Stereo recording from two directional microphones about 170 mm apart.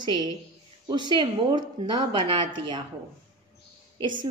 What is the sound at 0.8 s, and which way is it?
Speech, 25° right (ahead or behind).